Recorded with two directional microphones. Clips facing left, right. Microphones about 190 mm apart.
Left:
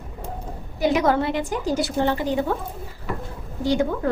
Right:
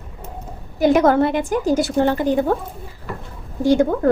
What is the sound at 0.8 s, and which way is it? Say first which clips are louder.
A woman's voice: right 6 dB; 50° right (ahead or behind).